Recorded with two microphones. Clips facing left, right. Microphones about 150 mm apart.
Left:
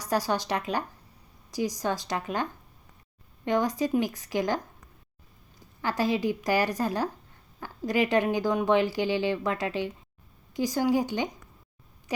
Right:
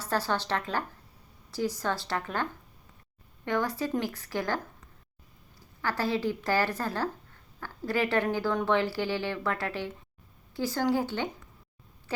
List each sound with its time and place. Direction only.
0.0 s speech: 15° left (ahead or behind)
5.8 s speech: 15° left (ahead or behind)